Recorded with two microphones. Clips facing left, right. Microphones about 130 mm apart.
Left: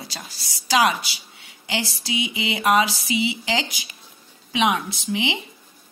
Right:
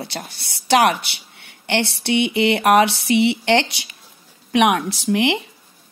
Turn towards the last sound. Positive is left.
turn(degrees=-75)  # may be behind; listen again after turning